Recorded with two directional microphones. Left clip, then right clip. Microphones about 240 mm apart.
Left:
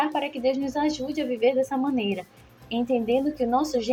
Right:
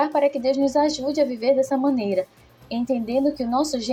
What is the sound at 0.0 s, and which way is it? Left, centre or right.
A woman's voice, centre.